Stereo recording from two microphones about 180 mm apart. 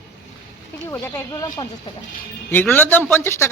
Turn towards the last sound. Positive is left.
turn(degrees=10)  # may be behind; listen again after turning